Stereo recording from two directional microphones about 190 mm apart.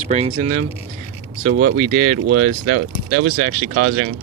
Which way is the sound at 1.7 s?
40° right (ahead or behind).